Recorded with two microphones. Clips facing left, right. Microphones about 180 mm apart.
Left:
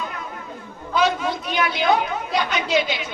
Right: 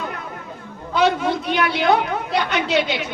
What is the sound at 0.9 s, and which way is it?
A woman's voice, 65° right (ahead or behind).